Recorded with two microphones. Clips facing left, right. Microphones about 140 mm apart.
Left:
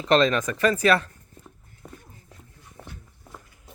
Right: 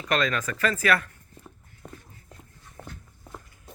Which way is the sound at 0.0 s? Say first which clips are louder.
Left 6 dB; 25° left (ahead or behind).